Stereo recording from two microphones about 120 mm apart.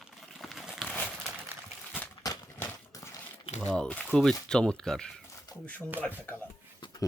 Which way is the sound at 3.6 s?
5° left (ahead or behind).